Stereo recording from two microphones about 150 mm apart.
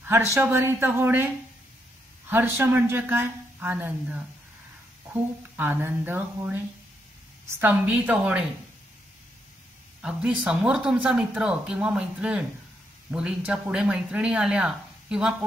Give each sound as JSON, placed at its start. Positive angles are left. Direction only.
{"t": 0.0, "sound": "speech", "side_deg": -15}
{"t": 10.0, "sound": "speech", "side_deg": -5}